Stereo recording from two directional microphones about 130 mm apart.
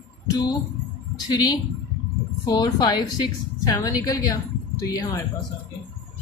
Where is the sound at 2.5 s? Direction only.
30° left (ahead or behind).